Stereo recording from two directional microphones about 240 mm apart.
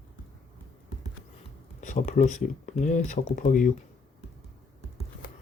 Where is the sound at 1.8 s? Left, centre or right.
Left.